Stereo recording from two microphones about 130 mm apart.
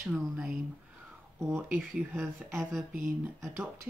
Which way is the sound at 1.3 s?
20° right (ahead or behind).